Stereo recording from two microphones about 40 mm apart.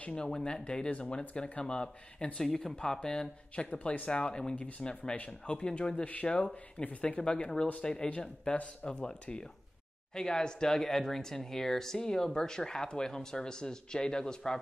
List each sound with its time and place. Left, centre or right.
0.2 s speech: centre
0.8 s speech: left
1.5 s speech: left
2.4 s speech: centre
3.5 s speech: left
4.6 s speech: left; by 8.1 s centre
8.5 s speech: left; by 14.6 s centre